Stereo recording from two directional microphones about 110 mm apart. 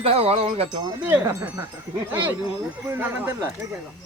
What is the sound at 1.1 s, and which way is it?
Speech, 25° right (ahead or behind).